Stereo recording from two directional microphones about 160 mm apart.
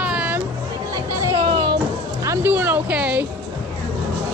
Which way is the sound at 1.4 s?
30° right (ahead or behind).